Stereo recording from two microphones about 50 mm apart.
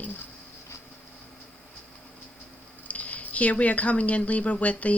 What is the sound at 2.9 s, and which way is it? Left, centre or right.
Speech, left.